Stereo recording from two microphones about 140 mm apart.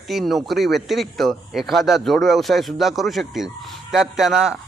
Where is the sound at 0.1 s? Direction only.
Centre (ahead or behind).